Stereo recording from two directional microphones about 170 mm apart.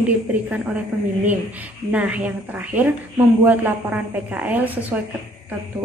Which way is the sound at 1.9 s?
10° right (ahead or behind).